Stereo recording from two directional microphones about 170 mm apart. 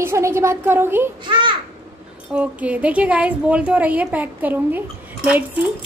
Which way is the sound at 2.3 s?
10° right (ahead or behind).